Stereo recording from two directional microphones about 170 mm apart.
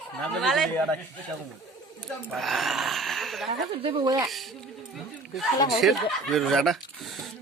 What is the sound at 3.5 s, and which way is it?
Speech, 35° right (ahead or behind).